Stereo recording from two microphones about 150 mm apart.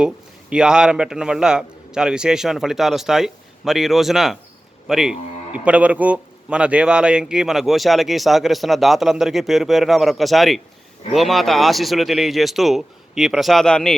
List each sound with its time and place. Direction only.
0.5 s speech: 5° right (ahead or behind)